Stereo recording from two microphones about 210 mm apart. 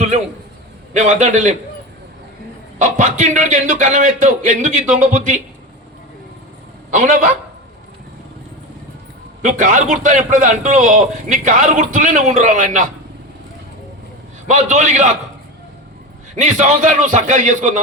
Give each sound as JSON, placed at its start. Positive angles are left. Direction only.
{"t": 0.9, "sound": "a man's voice", "side_deg": -35}
{"t": 2.7, "sound": "a man's voice", "side_deg": -35}
{"t": 7.0, "sound": "a man's voice", "side_deg": -35}
{"t": 9.4, "sound": "a man's voice", "side_deg": -35}
{"t": 14.5, "sound": "a man's voice", "side_deg": -35}
{"t": 16.3, "sound": "a man's voice", "side_deg": -35}